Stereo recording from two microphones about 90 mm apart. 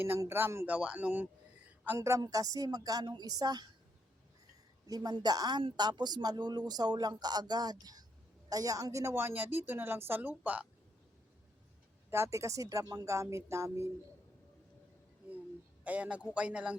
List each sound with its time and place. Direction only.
0.3 s a woman's voice: 25° right (ahead or behind)
2.0 s speech: 35° right (ahead or behind)
4.9 s a woman's voice: 50° right (ahead or behind); by 10.7 s 15° right (ahead or behind)
12.1 s speech: 30° right (ahead or behind)
13.1 s speech: 30° right (ahead or behind)
15.8 s a man's voice: 15° right (ahead or behind)